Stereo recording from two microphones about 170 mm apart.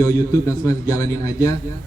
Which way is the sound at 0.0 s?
20° left (ahead or behind).